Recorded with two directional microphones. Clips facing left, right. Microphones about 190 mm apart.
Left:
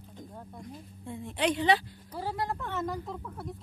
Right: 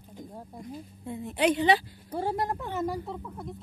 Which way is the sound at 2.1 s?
25° right (ahead or behind).